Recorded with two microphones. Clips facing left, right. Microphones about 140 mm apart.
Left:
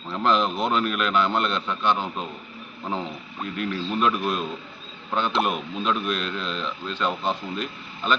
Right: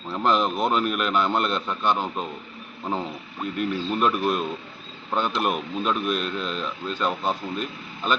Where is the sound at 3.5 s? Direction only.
5° right (ahead or behind).